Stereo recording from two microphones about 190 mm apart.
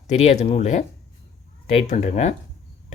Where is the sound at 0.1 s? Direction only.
35° left (ahead or behind).